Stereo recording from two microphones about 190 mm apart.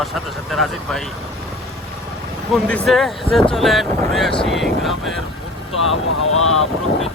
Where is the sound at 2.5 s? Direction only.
5° left (ahead or behind).